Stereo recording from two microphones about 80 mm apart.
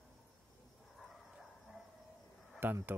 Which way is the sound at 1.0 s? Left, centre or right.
Centre.